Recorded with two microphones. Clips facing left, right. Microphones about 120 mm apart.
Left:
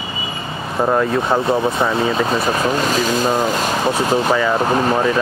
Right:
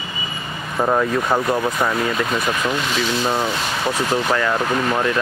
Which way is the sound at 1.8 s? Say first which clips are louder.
Left 3 dB; 30° left (ahead or behind).